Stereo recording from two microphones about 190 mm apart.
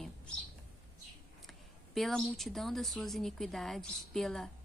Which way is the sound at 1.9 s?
Centre (ahead or behind).